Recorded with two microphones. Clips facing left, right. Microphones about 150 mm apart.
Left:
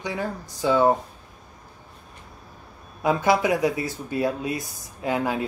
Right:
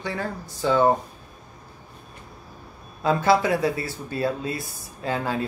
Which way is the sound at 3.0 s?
15° left (ahead or behind).